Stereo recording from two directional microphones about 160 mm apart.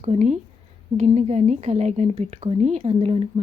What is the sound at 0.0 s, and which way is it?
A woman's voice, 45° right (ahead or behind).